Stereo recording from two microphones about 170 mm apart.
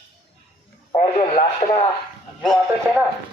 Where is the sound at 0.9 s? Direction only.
35° left (ahead or behind).